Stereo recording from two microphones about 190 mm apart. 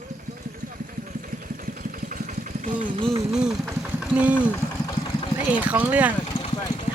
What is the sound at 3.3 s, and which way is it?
Speech, 5° right (ahead or behind).